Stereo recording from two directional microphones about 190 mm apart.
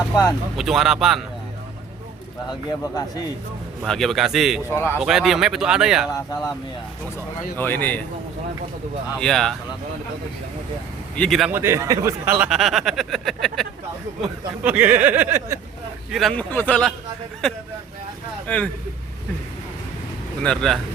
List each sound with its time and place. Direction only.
0.5 s speech: centre (ahead or behind)
2.5 s speech: 20° left (ahead or behind)
3.8 s speech: centre (ahead or behind)
4.7 s speech: 10° left (ahead or behind)
4.9 s speech: centre (ahead or behind)
7.6 s speech: 10° left (ahead or behind)
9.2 s speech: centre (ahead or behind)
11.2 s speech: centre (ahead or behind)
16.1 s speech: 5° left (ahead or behind)
20.4 s speech: 5° left (ahead or behind)